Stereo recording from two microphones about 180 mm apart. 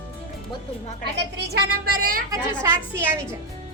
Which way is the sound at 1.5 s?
55° right (ahead or behind).